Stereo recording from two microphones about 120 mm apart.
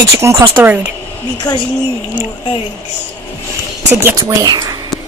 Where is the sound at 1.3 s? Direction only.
35° left (ahead or behind).